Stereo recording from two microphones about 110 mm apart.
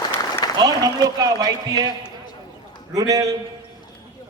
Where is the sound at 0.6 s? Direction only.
35° right (ahead or behind).